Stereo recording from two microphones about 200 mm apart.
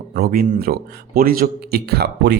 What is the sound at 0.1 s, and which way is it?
A man's voice, 45° right (ahead or behind).